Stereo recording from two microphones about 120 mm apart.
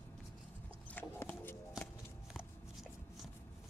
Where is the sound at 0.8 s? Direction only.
15° left (ahead or behind).